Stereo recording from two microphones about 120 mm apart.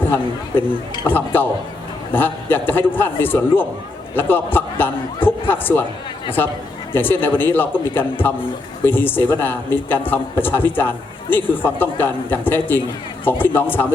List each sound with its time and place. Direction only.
1.0 s a man's voice: 15° left (ahead or behind)
6.9 s a man's voice: 15° left (ahead or behind)